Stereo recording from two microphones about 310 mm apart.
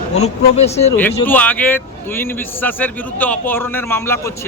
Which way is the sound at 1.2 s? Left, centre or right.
Centre.